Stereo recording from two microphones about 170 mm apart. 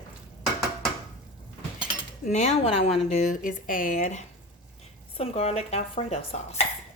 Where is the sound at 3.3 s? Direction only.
55° left (ahead or behind); by 6.2 s 40° left (ahead or behind).